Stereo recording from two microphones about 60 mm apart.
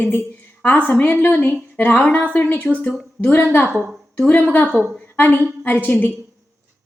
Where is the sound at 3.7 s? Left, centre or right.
Centre.